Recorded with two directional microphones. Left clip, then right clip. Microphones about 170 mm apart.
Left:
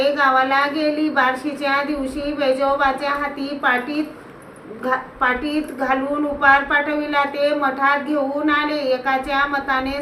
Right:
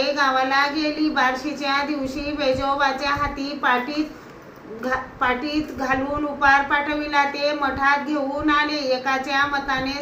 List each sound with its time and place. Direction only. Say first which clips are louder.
0.2 s a woman's voice: left 1 dB; 15° left (ahead or behind)
4.9 s a woman's voice: left 3 dB; 15° left (ahead or behind)